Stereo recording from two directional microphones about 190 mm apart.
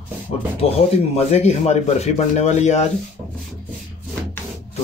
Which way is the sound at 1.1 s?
35° left (ahead or behind).